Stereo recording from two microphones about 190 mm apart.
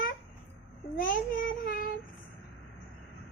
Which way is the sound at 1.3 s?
50° left (ahead or behind).